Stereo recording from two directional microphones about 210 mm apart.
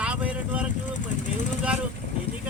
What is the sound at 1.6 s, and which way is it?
Speech, 5° right (ahead or behind).